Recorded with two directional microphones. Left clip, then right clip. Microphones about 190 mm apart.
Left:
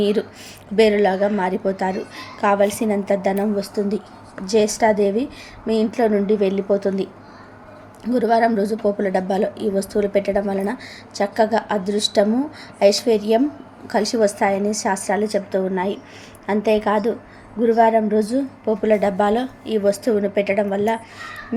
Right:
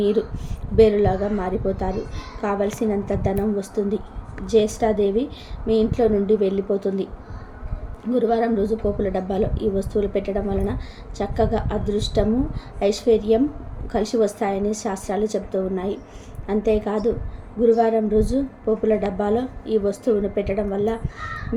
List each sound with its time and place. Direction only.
0.8 s a woman's voice: 15° left (ahead or behind)